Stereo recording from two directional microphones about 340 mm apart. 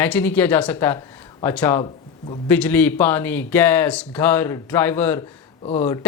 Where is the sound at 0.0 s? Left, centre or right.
Centre.